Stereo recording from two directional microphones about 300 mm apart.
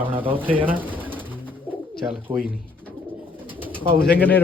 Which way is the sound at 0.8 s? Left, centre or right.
Centre.